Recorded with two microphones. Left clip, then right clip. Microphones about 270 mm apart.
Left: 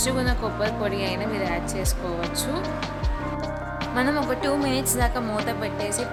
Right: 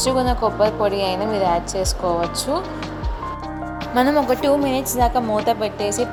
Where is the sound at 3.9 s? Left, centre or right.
Centre.